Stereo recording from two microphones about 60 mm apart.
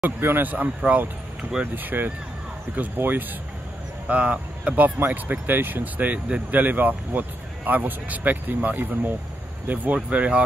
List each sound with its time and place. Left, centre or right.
0.0 s speech: right
10.0 s speech: right